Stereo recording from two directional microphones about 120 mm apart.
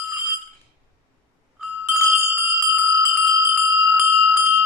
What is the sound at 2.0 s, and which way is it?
Bell, 20° right (ahead or behind).